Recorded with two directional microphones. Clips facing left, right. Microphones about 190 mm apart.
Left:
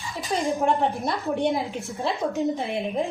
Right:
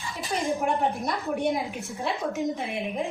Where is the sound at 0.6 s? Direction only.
30° left (ahead or behind).